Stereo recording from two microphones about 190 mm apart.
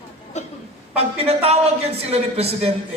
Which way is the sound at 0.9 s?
30° right (ahead or behind).